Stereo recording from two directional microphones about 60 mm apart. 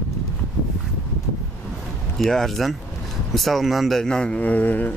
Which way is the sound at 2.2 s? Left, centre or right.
Centre.